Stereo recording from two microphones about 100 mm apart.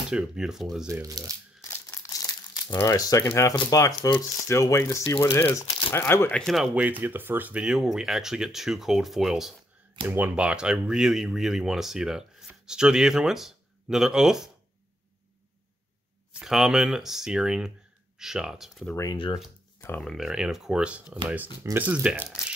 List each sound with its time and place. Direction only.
0.1 s speech: 5° right (ahead or behind)
1.0 s speech: 35° right (ahead or behind)
1.6 s crumpling: 35° left (ahead or behind)
2.7 s speech: 35° left (ahead or behind)
5.9 s speech: 25° left (ahead or behind)
6.3 s speech: centre (ahead or behind)
6.7 s speech: 15° right (ahead or behind)
7.6 s speech: 5° right (ahead or behind)
10.0 s speech: 20° right (ahead or behind)
16.3 s speech: 5° right (ahead or behind)
19.1 s speech: 60° left (ahead or behind)
20.0 s speech: centre (ahead or behind)